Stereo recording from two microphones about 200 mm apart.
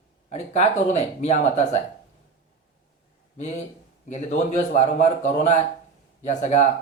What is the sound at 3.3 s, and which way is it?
A man's voice, 35° left (ahead or behind).